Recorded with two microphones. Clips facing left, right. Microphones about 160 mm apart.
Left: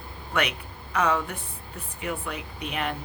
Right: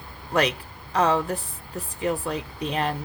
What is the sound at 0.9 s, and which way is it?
Speech, 30° right (ahead or behind).